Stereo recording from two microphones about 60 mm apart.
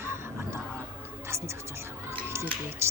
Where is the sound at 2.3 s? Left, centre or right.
Right.